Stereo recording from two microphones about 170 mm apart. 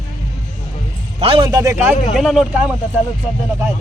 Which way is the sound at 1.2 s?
35° right (ahead or behind).